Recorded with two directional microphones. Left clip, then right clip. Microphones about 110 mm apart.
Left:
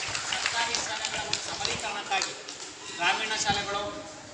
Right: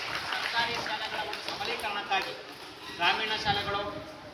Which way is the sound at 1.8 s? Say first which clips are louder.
Even; 10° left (ahead or behind).